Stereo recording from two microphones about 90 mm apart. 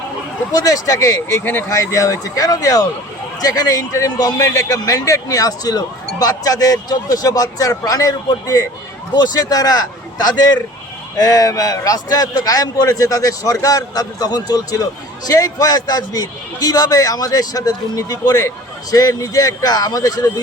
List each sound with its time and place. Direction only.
0.5 s speech: 40° left (ahead or behind); by 1.6 s 25° left (ahead or behind)
1.7 s a man's voice: 35° left (ahead or behind)